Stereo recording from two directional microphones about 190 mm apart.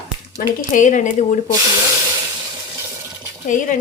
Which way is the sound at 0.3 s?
40° left (ahead or behind).